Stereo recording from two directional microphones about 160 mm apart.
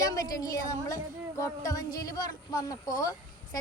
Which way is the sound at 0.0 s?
25° left (ahead or behind).